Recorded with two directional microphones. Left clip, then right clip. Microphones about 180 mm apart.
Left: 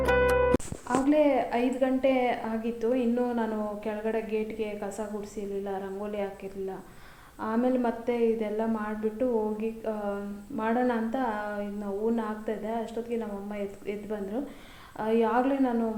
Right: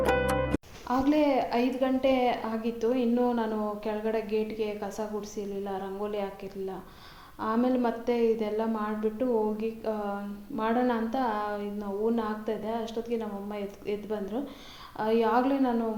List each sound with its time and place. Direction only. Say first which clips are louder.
0.0 s music: left 3 dB; centre (ahead or behind)
0.9 s a woman's voice: left 1 dB; 35° right (ahead or behind)
7.4 s a woman's voice: even; 30° right (ahead or behind)